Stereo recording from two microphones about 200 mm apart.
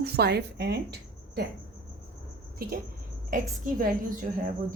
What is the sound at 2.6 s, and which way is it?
A woman's voice, 50° right (ahead or behind).